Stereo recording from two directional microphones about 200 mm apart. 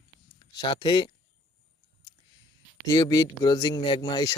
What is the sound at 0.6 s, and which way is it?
Speech, 20° left (ahead or behind).